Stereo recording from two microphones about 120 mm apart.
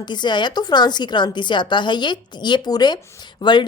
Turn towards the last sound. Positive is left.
turn(degrees=40)  # may be behind; listen again after turning